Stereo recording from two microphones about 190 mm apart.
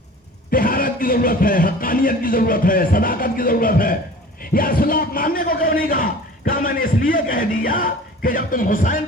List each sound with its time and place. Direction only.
0.5 s a man's voice: 50° left (ahead or behind)